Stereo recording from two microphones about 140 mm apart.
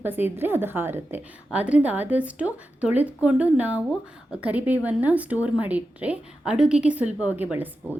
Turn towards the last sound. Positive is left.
turn(degrees=-15)  # may be behind; listen again after turning